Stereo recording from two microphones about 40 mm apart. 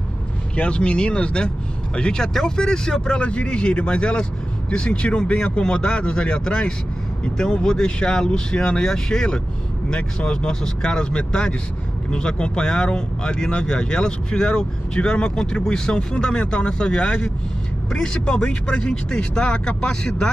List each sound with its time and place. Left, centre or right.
0.6 s speech: left